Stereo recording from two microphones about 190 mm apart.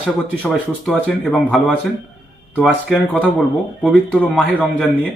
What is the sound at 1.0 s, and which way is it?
A man's voice, 5° left (ahead or behind).